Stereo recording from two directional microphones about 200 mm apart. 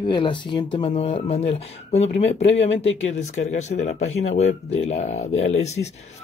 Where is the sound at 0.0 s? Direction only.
25° left (ahead or behind).